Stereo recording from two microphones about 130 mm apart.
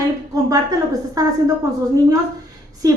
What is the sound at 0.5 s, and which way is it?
Speech, 25° right (ahead or behind).